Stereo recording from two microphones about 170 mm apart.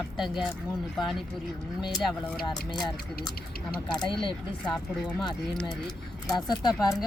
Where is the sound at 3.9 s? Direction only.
25° left (ahead or behind).